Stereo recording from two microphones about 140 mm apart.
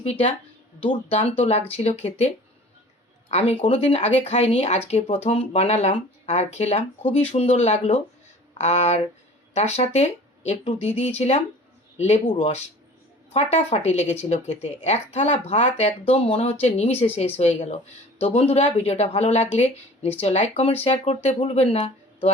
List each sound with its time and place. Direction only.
0.0 s speech: 45° left (ahead or behind)